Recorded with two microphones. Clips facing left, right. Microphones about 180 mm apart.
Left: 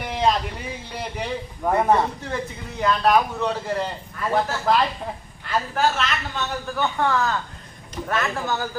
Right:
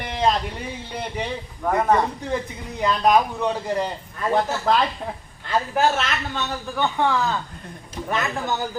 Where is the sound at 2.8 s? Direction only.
15° right (ahead or behind).